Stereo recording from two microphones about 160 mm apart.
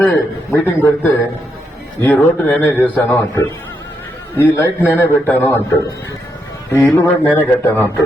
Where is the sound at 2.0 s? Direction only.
10° left (ahead or behind).